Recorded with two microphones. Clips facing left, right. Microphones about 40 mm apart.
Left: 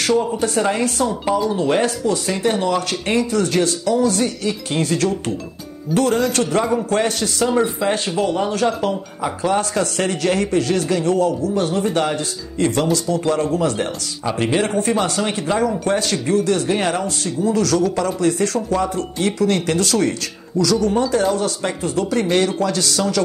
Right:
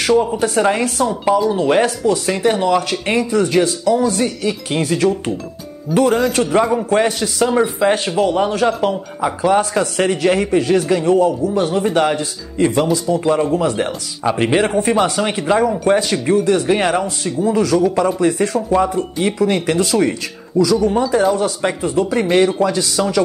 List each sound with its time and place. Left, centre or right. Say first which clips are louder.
0.0 s speech: right 3 dB; centre